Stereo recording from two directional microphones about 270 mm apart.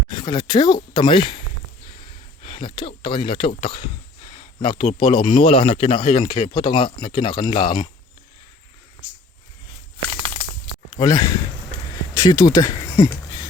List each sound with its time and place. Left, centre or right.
0.1 s speech: centre
2.4 s speech: centre
10.9 s speech: centre